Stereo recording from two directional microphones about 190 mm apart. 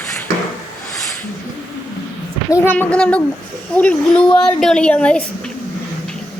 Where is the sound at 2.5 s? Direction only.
15° left (ahead or behind).